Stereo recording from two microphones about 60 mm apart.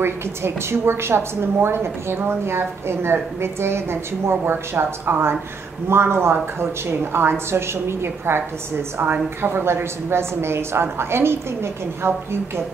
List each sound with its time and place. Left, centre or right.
0.0 s a woman's voice: right